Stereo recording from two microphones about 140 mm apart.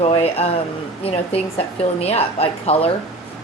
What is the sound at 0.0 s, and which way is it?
Speech, 45° left (ahead or behind).